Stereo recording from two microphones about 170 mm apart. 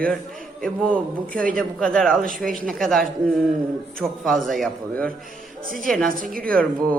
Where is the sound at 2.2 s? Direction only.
55° right (ahead or behind).